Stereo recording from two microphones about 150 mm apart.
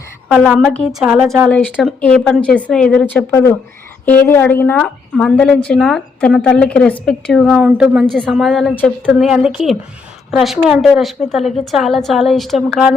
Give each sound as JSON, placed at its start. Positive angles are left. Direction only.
{"t": 0.3, "sound": "a woman's voice", "side_deg": 5}
{"t": 1.5, "sound": "a woman's voice", "side_deg": 10}
{"t": 3.3, "sound": "a woman's voice", "side_deg": 15}
{"t": 8.7, "sound": "a woman's voice", "side_deg": 10}
{"t": 9.1, "sound": "a woman's voice", "side_deg": -5}